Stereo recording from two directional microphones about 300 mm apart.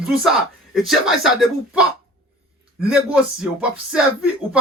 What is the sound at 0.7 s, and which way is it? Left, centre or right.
Speech, centre.